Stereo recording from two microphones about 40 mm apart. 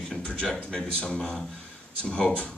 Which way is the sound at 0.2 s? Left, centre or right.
Left.